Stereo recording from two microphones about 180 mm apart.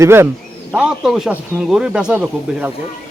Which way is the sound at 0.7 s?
5° right (ahead or behind).